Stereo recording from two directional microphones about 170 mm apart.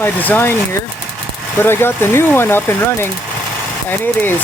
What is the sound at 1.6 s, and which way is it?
Speech, 15° left (ahead or behind).